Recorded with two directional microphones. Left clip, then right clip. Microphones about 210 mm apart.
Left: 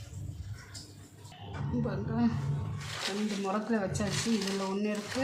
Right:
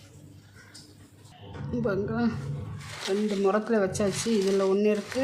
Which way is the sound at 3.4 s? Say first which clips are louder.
Right 8 dB; 50° right (ahead or behind).